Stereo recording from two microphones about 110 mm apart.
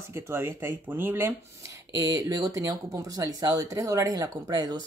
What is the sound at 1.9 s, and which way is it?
Speech, 30° right (ahead or behind).